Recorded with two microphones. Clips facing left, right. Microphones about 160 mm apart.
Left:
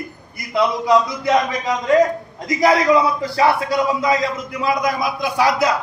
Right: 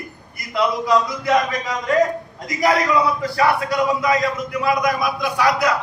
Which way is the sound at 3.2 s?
25° left (ahead or behind).